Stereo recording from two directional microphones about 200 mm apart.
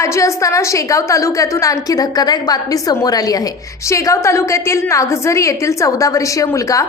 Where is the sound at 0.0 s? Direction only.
15° left (ahead or behind).